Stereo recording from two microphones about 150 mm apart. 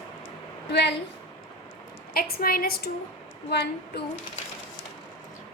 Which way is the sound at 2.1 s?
90° left.